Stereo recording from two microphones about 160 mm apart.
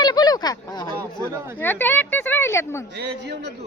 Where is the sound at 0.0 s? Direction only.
25° left (ahead or behind).